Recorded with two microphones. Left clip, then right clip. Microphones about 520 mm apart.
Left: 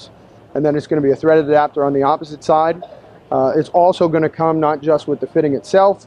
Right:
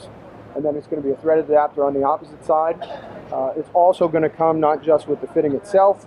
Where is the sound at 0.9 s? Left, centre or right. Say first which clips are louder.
Left 9 dB; left.